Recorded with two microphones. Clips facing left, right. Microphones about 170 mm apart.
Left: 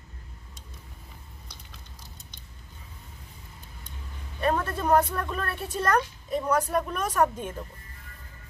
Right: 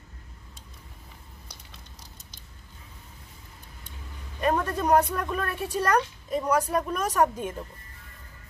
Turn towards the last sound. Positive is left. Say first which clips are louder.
# right 1 dB
turn(degrees=-10)  # may be behind; listen again after turning